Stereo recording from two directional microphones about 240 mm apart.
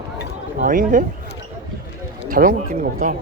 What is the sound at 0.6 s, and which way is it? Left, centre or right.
Speech, right.